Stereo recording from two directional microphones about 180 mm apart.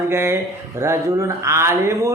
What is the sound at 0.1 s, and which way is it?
Speech, 15° right (ahead or behind).